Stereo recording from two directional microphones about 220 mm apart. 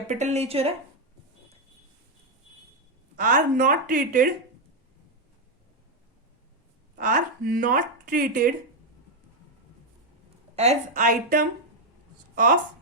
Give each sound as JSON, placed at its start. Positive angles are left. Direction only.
{"t": 0.1, "sound": "speech", "side_deg": -30}
{"t": 3.2, "sound": "speech", "side_deg": -35}
{"t": 7.0, "sound": "speech", "side_deg": -40}
{"t": 10.5, "sound": "speech", "side_deg": -30}